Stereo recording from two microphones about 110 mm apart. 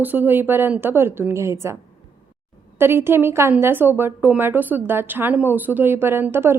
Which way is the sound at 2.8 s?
20° right (ahead or behind).